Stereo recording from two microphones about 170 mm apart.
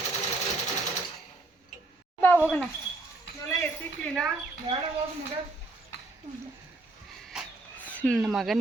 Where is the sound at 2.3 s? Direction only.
5° right (ahead or behind).